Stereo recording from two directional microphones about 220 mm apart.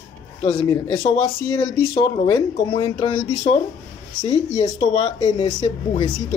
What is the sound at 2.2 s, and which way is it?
Speech, 20° left (ahead or behind).